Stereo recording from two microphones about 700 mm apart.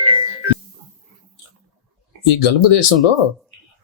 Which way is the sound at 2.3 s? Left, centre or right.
Left.